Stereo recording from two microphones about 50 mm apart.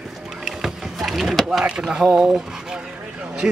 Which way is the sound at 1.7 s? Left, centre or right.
Centre.